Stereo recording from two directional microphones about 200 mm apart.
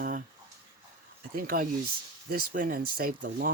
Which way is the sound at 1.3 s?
45° right (ahead or behind).